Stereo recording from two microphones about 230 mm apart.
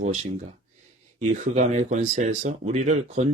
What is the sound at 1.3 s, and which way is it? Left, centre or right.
Speech, right.